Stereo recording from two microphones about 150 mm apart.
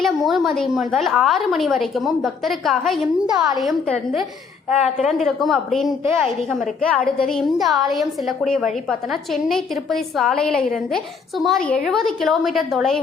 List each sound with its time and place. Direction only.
0.0 s a woman's voice: centre (ahead or behind)